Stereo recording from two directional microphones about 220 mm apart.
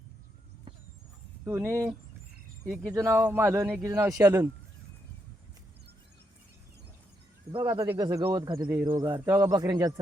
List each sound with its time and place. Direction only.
1.5 s a man's voice: 10° right (ahead or behind)
2.8 s a man's voice: 15° right (ahead or behind)
7.5 s a man's voice: 20° right (ahead or behind)